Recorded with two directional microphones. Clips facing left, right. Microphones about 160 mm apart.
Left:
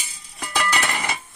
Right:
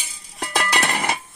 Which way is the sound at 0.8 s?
40° right (ahead or behind).